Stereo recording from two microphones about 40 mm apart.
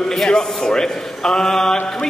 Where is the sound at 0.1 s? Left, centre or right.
Centre.